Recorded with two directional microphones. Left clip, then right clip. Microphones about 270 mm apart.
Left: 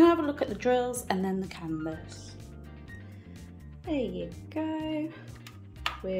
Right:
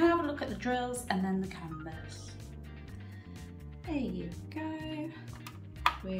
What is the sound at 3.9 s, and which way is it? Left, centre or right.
Speech, centre.